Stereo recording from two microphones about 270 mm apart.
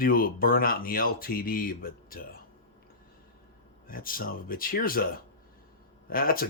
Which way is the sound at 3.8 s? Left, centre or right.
Left.